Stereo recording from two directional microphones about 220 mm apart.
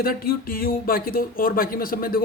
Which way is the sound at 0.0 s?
40° left (ahead or behind).